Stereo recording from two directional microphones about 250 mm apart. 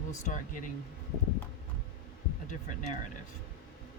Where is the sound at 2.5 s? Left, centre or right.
Left.